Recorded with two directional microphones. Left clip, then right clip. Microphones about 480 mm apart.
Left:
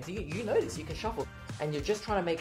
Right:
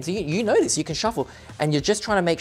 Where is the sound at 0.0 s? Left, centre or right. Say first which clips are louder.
Right 12 dB; right.